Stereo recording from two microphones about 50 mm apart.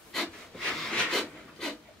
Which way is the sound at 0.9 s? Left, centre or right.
Centre.